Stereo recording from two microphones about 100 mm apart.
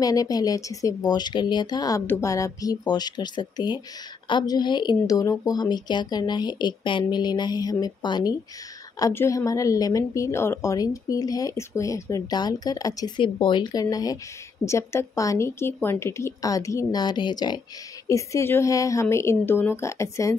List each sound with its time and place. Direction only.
0.0 s a woman's voice: 35° left (ahead or behind)
9.1 s a woman's voice: 30° left (ahead or behind)
13.2 s a woman's voice: 55° left (ahead or behind)
18.0 s a woman's voice: 30° left (ahead or behind)